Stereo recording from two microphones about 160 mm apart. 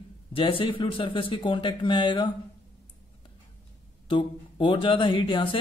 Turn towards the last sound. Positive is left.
turn(degrees=30)  # may be behind; listen again after turning